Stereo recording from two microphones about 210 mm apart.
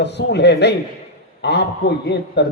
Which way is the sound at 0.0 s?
55° left (ahead or behind).